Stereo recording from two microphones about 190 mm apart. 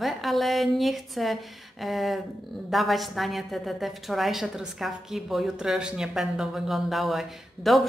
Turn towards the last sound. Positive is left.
turn(degrees=0)  # may be behind; listen again after turning